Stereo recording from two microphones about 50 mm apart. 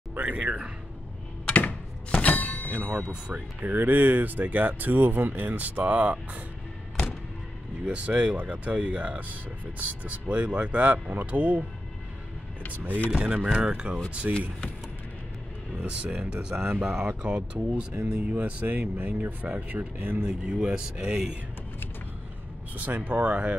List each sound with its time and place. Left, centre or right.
0.2 s speech: right
2.0 s thunk: left
2.7 s speech: right
7.8 s speech: right
12.7 s speech: right
13.2 s speech: right
15.8 s speech: right
17.4 s speech: right
18.0 s speech: right
20.2 s speech: right
22.8 s speech: right